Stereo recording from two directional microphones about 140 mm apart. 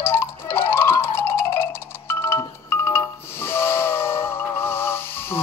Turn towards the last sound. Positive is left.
turn(degrees=15)  # may be behind; listen again after turning